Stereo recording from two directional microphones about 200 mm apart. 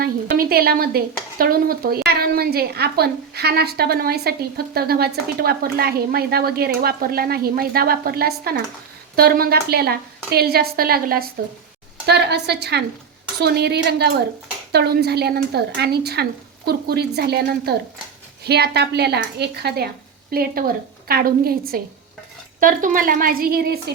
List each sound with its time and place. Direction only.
0.0 s a woman's voice: 50° right (ahead or behind)